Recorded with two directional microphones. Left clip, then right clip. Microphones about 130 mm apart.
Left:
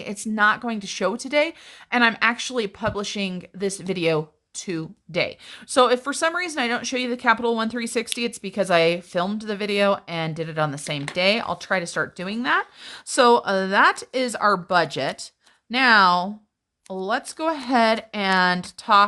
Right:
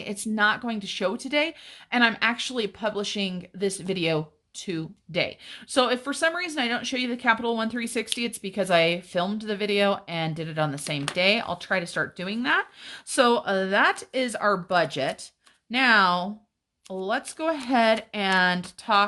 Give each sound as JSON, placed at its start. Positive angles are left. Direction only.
{"t": 0.0, "sound": "speech", "side_deg": 35}